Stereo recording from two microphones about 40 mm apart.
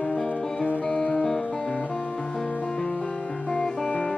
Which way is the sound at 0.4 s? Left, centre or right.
Centre.